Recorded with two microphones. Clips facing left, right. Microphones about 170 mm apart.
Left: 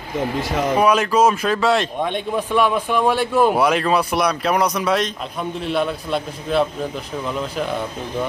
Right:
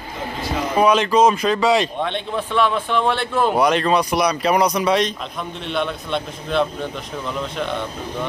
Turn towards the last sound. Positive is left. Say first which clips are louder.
# left 1 dB
turn(degrees=5)  # may be behind; listen again after turning